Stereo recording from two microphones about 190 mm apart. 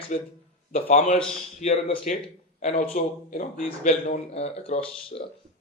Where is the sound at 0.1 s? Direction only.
40° left (ahead or behind).